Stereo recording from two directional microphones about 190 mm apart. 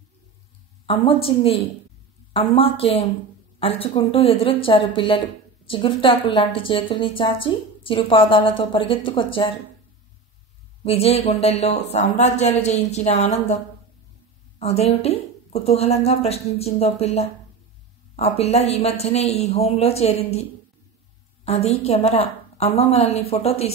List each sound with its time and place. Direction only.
0.8 s a woman's voice: 30° left (ahead or behind)
10.8 s a woman's voice: 30° left (ahead or behind)
14.6 s a woman's voice: 35° left (ahead or behind)
21.5 s a woman's voice: 35° left (ahead or behind)